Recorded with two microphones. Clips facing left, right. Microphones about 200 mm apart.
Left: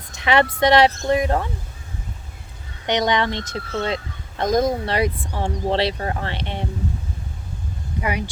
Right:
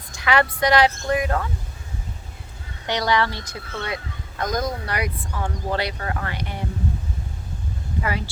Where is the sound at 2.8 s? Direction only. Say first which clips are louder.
Left 2 dB; 20° left (ahead or behind).